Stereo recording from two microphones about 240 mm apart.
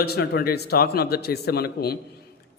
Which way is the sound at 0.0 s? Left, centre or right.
Left.